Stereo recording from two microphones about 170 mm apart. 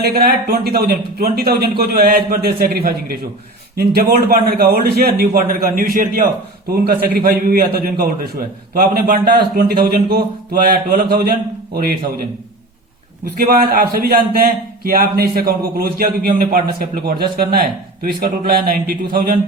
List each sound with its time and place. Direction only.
0.0 s speech: 65° right (ahead or behind)
13.3 s speech: 60° right (ahead or behind)